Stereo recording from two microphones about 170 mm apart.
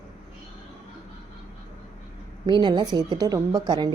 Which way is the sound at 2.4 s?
25° right (ahead or behind).